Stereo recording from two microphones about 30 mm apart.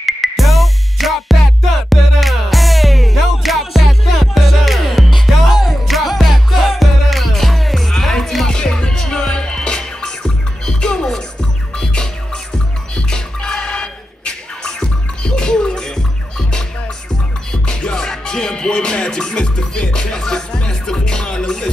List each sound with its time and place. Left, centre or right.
0.0 s music: centre
8.5 s music: left
17.5 s music: left
17.9 s music: centre
18.2 s music: left